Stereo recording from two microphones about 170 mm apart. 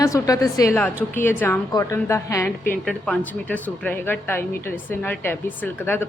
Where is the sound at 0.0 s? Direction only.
20° left (ahead or behind).